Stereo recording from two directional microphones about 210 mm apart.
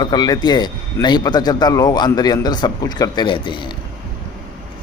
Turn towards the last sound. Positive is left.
turn(degrees=25)  # may be behind; listen again after turning